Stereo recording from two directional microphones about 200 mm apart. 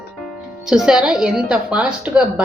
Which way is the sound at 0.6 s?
5° right (ahead or behind).